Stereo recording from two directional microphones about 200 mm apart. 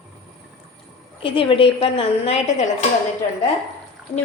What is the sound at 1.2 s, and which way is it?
A woman's voice, 25° left (ahead or behind).